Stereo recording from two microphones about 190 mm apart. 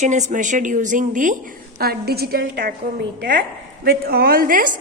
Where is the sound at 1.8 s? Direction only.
55° right (ahead or behind).